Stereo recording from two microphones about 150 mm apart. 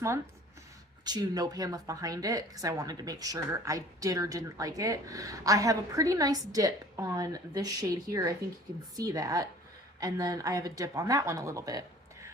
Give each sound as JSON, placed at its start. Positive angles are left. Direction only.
{"t": 1.0, "sound": "a woman's voice", "side_deg": -25}